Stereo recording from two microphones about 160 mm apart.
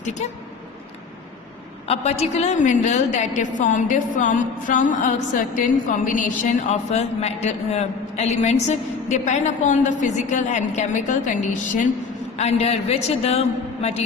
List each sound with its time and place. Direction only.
0.0 s speech: 45° left (ahead or behind)
1.9 s a woman's voice: 40° left (ahead or behind)
12.4 s a man's voice: 40° left (ahead or behind)